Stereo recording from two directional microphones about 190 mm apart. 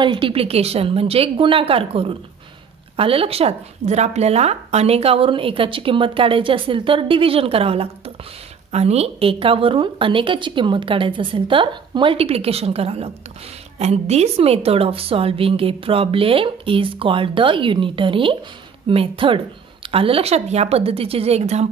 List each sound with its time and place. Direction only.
0.0 s a woman's voice: 25° right (ahead or behind)